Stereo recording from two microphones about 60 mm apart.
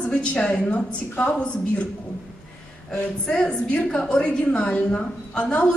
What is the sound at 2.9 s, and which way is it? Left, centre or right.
A woman's voice, centre.